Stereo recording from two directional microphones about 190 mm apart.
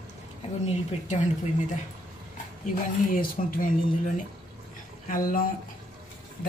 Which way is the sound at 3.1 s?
45° left (ahead or behind).